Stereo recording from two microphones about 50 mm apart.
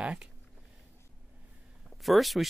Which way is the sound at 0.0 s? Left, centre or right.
Centre.